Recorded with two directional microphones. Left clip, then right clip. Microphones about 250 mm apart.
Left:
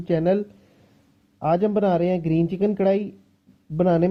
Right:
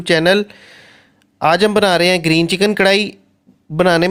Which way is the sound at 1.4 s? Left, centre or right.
Centre.